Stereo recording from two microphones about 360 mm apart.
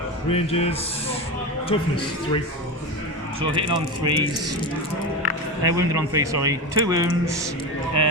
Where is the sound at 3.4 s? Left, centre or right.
Centre.